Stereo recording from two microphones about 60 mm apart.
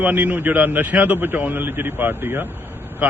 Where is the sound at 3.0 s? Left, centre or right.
Right.